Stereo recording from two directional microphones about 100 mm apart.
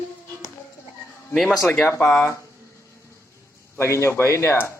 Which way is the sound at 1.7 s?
15° left (ahead or behind).